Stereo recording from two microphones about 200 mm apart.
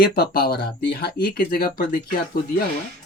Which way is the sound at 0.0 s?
50° left (ahead or behind).